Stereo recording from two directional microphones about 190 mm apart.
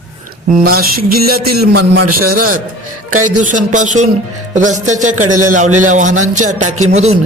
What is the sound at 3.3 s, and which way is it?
A man's voice, 40° right (ahead or behind).